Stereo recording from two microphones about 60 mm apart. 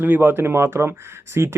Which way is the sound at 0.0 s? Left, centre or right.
Right.